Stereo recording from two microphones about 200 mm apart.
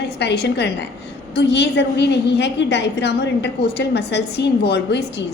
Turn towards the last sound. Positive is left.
turn(degrees=55)  # may be behind; listen again after turning